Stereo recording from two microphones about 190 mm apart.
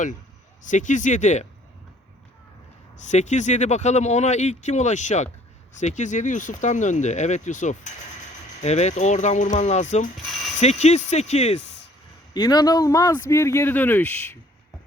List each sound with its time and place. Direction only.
0.6 s speech: 40° left (ahead or behind)
3.1 s speech: 40° left (ahead or behind)
12.3 s speech: 20° left (ahead or behind)